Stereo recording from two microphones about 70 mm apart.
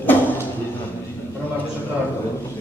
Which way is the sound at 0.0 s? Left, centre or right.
Left.